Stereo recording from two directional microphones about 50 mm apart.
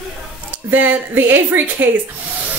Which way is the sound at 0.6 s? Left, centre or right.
Right.